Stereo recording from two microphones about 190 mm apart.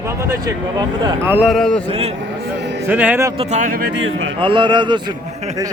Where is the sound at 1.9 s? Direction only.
35° right (ahead or behind).